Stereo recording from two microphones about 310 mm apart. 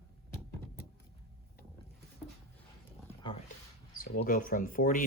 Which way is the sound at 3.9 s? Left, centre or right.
Left.